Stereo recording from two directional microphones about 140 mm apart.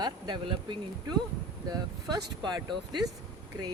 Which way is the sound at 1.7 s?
30° right (ahead or behind).